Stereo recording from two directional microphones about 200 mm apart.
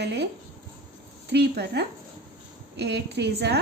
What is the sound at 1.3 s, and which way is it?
A woman's voice, 55° right (ahead or behind).